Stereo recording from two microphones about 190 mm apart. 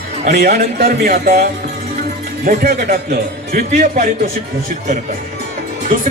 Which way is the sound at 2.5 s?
50° right (ahead or behind).